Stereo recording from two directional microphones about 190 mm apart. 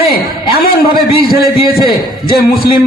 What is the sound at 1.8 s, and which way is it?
Speech, 55° left (ahead or behind).